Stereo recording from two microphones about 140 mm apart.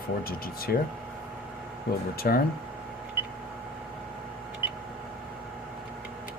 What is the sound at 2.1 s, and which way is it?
Speech, 90° left.